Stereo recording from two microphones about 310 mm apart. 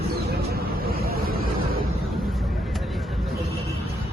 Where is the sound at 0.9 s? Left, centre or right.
Right.